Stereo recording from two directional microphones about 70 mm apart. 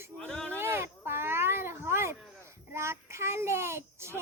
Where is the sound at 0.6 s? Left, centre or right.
Right.